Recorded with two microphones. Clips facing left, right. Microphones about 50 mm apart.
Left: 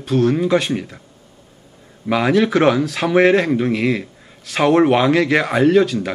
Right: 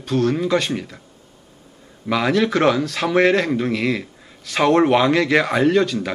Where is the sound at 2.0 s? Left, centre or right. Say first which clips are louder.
Left 3 dB; centre.